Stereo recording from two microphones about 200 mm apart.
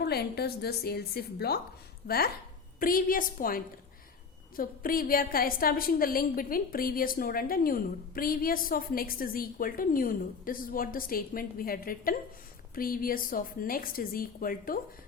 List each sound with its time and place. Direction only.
0.0 s a woman's voice: 50° left (ahead or behind)